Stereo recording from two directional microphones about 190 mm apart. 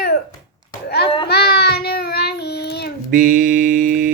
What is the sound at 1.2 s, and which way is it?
Child singing, 60° left (ahead or behind).